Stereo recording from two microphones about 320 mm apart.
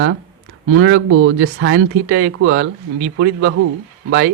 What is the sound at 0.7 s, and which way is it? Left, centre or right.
Speech, right.